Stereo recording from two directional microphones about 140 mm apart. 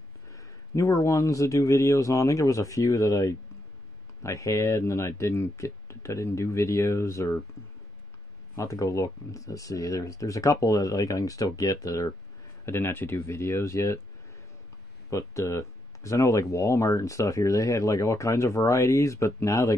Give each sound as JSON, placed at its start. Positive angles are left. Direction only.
{"t": 0.3, "sound": "speech", "side_deg": 20}
{"t": 8.5, "sound": "speech", "side_deg": 20}
{"t": 15.0, "sound": "speech", "side_deg": 20}